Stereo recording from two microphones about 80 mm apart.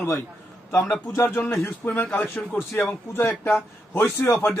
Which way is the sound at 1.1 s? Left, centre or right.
Left.